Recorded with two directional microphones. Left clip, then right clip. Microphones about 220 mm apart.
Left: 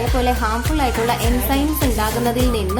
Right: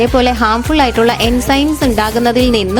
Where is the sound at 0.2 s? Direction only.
35° right (ahead or behind).